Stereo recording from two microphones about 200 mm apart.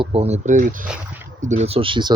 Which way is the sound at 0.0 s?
30° right (ahead or behind).